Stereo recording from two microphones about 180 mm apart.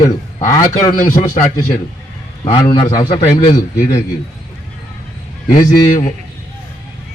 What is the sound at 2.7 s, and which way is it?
Speech, 25° left (ahead or behind).